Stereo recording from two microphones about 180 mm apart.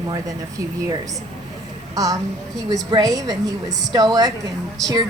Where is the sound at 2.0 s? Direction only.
20° right (ahead or behind).